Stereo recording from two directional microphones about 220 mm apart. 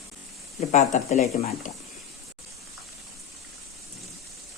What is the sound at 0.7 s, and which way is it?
Speech, 35° left (ahead or behind).